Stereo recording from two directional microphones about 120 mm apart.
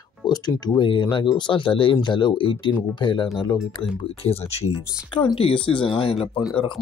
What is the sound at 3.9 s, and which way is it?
Speech, 55° left (ahead or behind).